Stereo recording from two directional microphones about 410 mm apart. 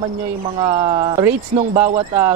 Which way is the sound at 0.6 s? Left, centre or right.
Centre.